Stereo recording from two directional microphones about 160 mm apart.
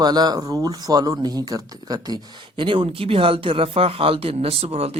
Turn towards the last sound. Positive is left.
turn(degrees=-40)  # may be behind; listen again after turning